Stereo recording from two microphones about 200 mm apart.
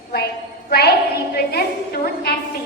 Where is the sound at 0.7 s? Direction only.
50° left (ahead or behind).